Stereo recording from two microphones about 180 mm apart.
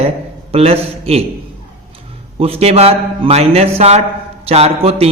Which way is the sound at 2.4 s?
35° right (ahead or behind).